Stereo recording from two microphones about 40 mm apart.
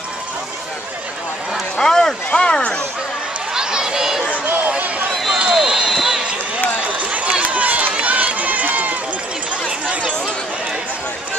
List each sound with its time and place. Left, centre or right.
1.8 s run: centre
2.3 s speech: left
3.5 s a sound: centre
4.6 s run: right
5.4 s a sound: centre
5.9 s run: centre
7.0 s run: right
9.7 s chatter: right